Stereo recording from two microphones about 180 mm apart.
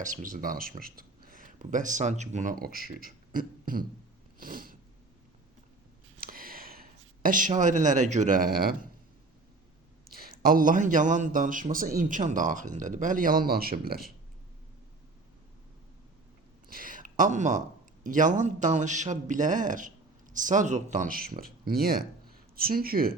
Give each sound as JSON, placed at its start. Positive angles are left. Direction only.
{"t": 0.0, "sound": "speech", "side_deg": -45}
{"t": 4.4, "sound": "cat", "side_deg": -50}
{"t": 6.1, "sound": "a sound", "side_deg": -55}
{"t": 10.1, "sound": "a man's voice", "side_deg": -55}
{"t": 16.6, "sound": "a sound", "side_deg": -50}
{"t": 18.0, "sound": "a man's voice", "side_deg": -45}